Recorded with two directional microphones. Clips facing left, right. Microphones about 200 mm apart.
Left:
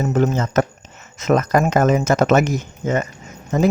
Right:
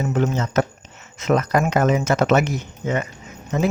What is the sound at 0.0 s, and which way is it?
Speech, 40° left (ahead or behind).